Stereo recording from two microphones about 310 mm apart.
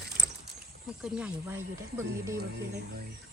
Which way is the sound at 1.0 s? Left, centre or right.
Centre.